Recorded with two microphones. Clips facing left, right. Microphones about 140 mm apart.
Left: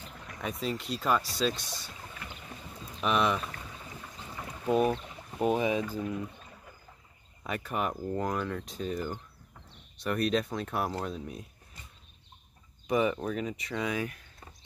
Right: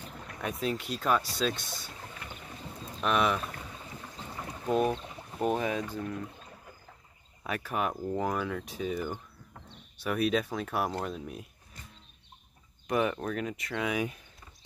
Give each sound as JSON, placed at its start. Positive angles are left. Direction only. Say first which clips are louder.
{"t": 0.4, "sound": "speech", "louder": "right 1 dB", "side_deg": 0}
{"t": 3.0, "sound": "speech", "louder": "even", "side_deg": 0}
{"t": 4.6, "sound": "speech", "louder": "left 1 dB", "side_deg": 5}
{"t": 7.4, "sound": "speech", "louder": "even", "side_deg": 0}
{"t": 12.8, "sound": "speech", "louder": "left 1 dB", "side_deg": 0}